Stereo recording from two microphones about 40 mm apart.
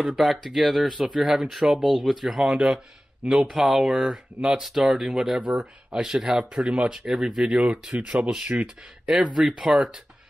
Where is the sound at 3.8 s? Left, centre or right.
Centre.